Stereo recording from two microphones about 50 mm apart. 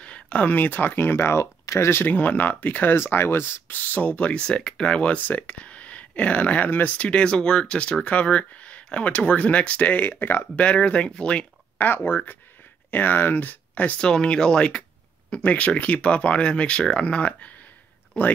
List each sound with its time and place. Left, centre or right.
0.0 s a sound: left
0.5 s speech: left
2.0 s speech: left
2.9 s speech: left; by 5.2 s centre
5.2 s speech: left
10.0 s speech: left
10.6 s speech: left
11.8 s speech: left
14.0 s speech: centre
15.4 s speech: left